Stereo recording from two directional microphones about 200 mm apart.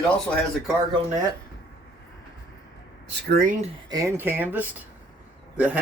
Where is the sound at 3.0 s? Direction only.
50° right (ahead or behind).